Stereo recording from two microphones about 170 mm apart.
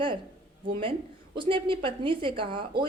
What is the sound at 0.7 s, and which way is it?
A woman's voice, 30° right (ahead or behind).